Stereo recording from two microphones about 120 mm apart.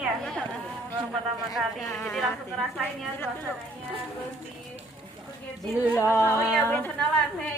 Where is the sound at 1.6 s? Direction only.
Centre (ahead or behind).